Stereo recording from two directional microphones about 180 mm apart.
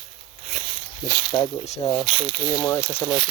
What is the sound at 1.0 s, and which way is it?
Speech, 20° right (ahead or behind).